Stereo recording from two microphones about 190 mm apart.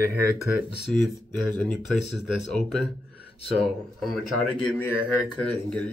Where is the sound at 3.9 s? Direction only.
Centre (ahead or behind).